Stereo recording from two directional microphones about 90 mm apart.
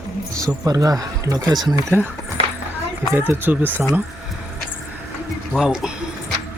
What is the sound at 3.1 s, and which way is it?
Speech, 25° right (ahead or behind).